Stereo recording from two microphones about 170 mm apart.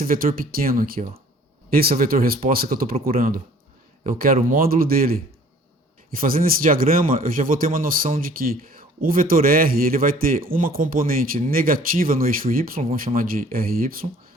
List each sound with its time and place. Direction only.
0.0 s speech: 55° right (ahead or behind)